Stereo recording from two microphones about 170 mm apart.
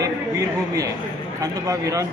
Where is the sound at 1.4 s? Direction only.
20° right (ahead or behind).